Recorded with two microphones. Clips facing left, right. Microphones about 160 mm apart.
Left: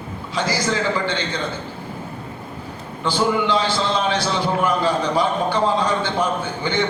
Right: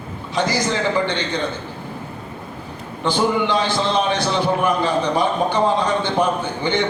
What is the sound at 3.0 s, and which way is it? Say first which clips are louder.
A man's voice: right 1 dB; 20° right (ahead or behind).